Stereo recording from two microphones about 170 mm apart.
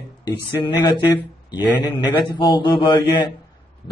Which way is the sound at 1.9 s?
30° left (ahead or behind).